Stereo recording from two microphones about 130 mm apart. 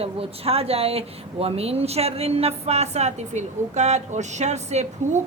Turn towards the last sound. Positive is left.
turn(degrees=-65)  # may be behind; listen again after turning